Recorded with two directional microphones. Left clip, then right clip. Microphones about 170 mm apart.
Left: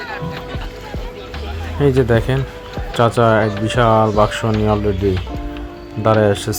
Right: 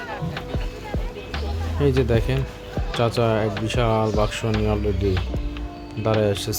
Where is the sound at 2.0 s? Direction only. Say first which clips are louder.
Left 6 dB; 15° left (ahead or behind).